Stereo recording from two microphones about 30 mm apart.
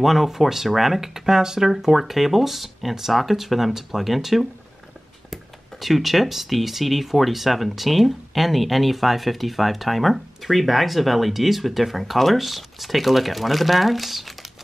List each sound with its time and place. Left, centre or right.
0.0 s speech: centre
1.1 s speech: centre
1.7 s speech: centre